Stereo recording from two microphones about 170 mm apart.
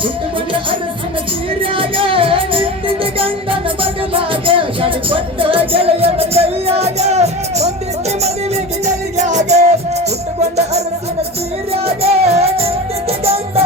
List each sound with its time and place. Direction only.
1.7 s music: 30° right (ahead or behind)
9.1 s music: 45° right (ahead or behind)